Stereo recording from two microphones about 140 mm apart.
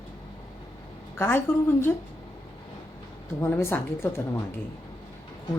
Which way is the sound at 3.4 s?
15° left (ahead or behind).